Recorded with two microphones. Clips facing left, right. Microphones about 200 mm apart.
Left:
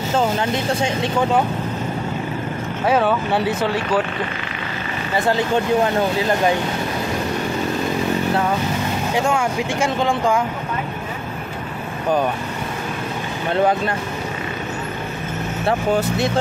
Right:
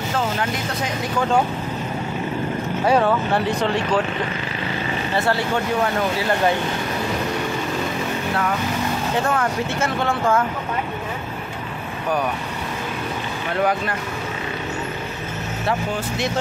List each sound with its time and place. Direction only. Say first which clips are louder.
0.4 s speech: left 4 dB; 25° left (ahead or behind)
2.8 s speech: even; centre (ahead or behind)
5.1 s speech: left 4 dB; 15° left (ahead or behind)
9.1 s speech: left 3 dB; 15° left (ahead or behind)
13.6 s speech: left 3 dB; 25° left (ahead or behind)